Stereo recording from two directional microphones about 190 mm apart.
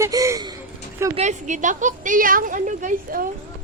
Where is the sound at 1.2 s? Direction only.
40° right (ahead or behind).